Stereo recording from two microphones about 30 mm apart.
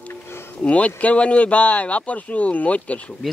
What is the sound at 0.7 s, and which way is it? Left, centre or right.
Speech, left.